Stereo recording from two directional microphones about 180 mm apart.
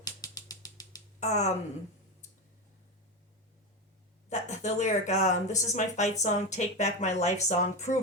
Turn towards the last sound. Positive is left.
turn(degrees=40)  # may be behind; listen again after turning